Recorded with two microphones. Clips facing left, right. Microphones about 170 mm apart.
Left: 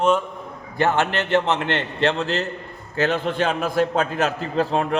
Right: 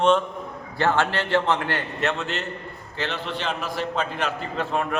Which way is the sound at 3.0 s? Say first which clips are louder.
Left 8 dB; 50° left (ahead or behind).